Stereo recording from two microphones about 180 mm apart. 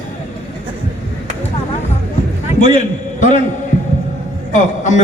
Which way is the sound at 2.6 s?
40° left (ahead or behind).